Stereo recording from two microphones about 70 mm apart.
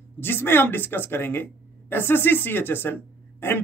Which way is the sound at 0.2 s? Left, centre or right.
Left.